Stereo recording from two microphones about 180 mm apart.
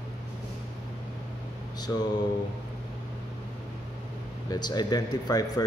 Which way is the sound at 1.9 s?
20° left (ahead or behind).